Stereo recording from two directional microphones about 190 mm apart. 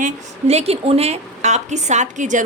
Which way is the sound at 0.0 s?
35° right (ahead or behind).